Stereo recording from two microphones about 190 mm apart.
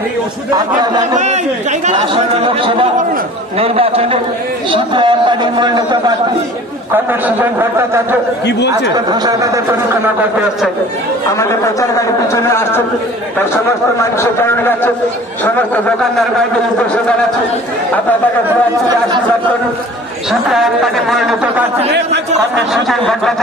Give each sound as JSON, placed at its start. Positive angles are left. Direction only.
{"t": 1.1, "sound": "a man's voice", "side_deg": -40}
{"t": 6.9, "sound": "a man's voice", "side_deg": -10}
{"t": 8.5, "sound": "speech", "side_deg": 65}
{"t": 8.9, "sound": "a man's voice", "side_deg": -20}
{"t": 11.3, "sound": "speech", "side_deg": 15}
{"t": 14.1, "sound": "speech", "side_deg": 15}
{"t": 20.2, "sound": "a man's voice", "side_deg": 0}
{"t": 22.8, "sound": "a man's voice", "side_deg": 0}